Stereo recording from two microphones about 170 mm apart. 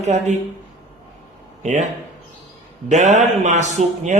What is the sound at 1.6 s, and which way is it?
Speech, 45° right (ahead or behind).